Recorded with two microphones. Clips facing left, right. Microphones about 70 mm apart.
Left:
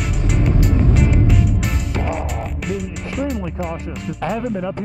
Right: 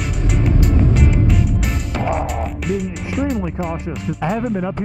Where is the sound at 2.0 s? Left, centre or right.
Centre.